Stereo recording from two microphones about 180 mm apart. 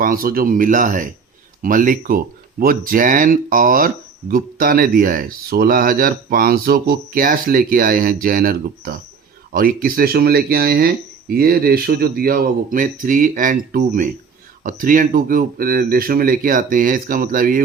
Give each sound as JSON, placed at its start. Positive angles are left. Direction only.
{"t": 0.0, "sound": "speech", "side_deg": -55}